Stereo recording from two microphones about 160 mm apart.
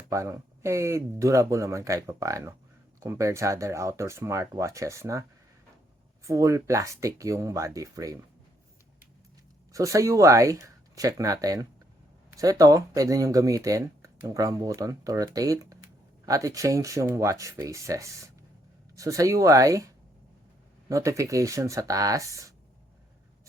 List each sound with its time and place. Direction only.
0.1 s speech: 20° right (ahead or behind)
6.2 s speech: 20° right (ahead or behind)
9.7 s speech: 20° right (ahead or behind)
20.9 s speech: 20° right (ahead or behind)